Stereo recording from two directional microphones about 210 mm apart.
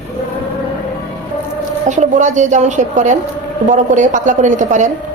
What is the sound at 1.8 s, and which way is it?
A woman's voice, 35° right (ahead or behind).